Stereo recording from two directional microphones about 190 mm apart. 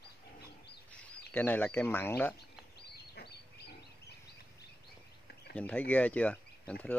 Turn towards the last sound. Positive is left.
turn(degrees=5)  # may be behind; listen again after turning